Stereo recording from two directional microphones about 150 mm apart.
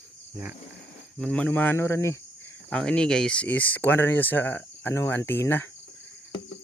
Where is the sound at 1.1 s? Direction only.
5° left (ahead or behind).